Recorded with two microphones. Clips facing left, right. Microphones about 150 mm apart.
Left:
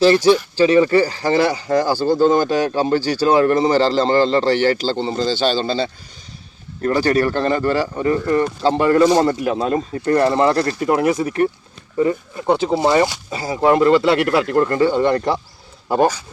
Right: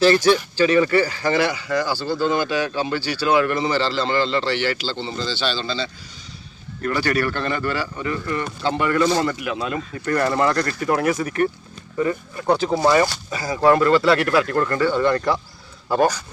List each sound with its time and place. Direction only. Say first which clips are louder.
0.0 s speech: left 3 dB; 30° left (ahead or behind); by 5.9 s 50° left (ahead or behind)
6.8 s speech: left 5 dB; 35° left (ahead or behind)
10.1 s speech: left 5 dB; 25° left (ahead or behind)